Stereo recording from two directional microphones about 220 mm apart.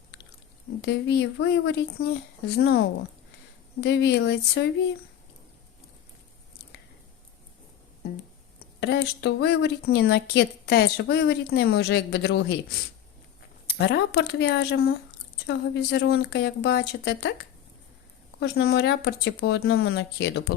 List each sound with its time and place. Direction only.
0.8 s speech: 50° left (ahead or behind)
8.8 s speech: 50° left (ahead or behind)
13.7 s speech: 50° left (ahead or behind)
18.3 s speech: 45° left (ahead or behind)